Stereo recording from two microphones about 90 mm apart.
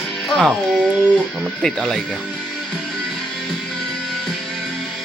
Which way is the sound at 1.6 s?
5° left (ahead or behind).